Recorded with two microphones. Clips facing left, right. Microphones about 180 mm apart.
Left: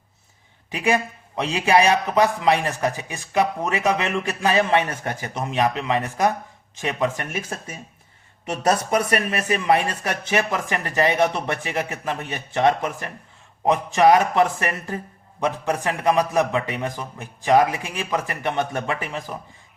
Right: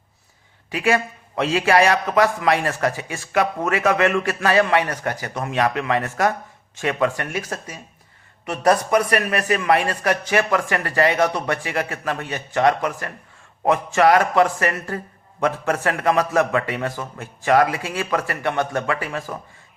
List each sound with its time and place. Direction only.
0.7 s a man's voice: 20° left (ahead or behind)
9.4 s a man's voice: 20° left (ahead or behind)